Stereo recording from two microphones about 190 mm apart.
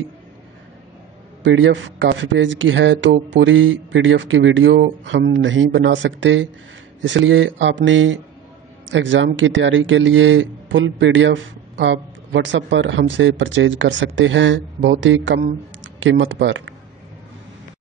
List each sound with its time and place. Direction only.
1.4 s speech: 75° right (ahead or behind)
7.0 s speech: 90° right